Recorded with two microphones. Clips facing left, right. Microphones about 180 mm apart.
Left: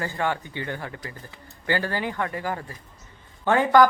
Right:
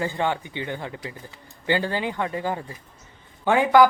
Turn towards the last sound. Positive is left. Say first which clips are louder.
# right 1 dB
turn(degrees=-10)  # may be behind; listen again after turning